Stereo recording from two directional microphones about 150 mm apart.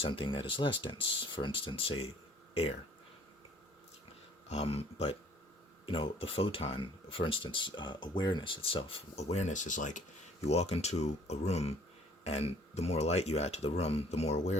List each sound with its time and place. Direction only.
0.0 s speech: 35° left (ahead or behind)
4.4 s speech: 45° left (ahead or behind)
10.4 s speech: 45° left (ahead or behind)